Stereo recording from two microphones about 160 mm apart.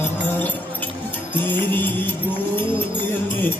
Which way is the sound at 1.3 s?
10° left (ahead or behind).